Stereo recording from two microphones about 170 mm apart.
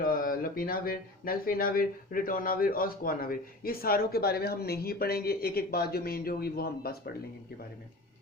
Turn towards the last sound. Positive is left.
turn(degrees=65)  # may be behind; listen again after turning